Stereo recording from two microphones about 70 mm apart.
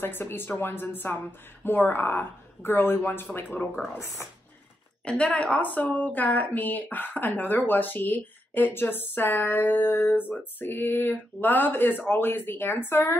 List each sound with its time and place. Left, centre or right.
0.0 s speech: left
5.0 s speech: centre; by 13.1 s left